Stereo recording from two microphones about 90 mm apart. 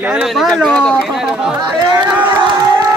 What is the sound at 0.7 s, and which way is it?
Speech, 10° left (ahead or behind).